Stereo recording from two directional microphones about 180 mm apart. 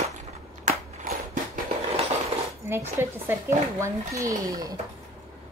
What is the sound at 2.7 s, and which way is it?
Speech, 15° right (ahead or behind).